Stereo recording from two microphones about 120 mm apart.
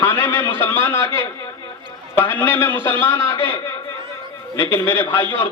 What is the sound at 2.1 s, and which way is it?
A man's voice, 15° left (ahead or behind).